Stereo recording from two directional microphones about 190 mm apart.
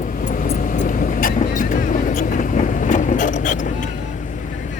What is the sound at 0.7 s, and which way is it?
Vehicle, 45° left (ahead or behind).